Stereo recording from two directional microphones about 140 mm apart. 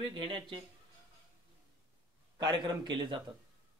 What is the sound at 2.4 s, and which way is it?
Speech, 30° right (ahead or behind).